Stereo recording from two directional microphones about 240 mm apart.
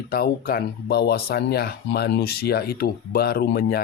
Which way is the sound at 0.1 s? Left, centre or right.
Left.